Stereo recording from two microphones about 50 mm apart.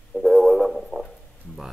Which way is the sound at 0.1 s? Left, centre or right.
Centre.